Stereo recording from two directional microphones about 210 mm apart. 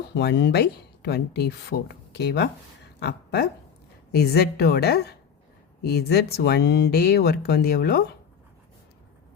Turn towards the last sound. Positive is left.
turn(degrees=50)  # may be behind; listen again after turning